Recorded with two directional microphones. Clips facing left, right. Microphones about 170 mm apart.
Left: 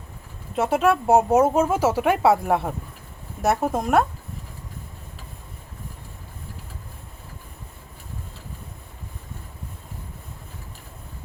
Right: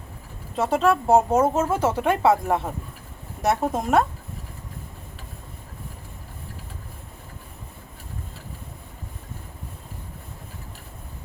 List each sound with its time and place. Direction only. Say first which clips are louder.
0.5 s speech: left 1 dB; 5° left (ahead or behind)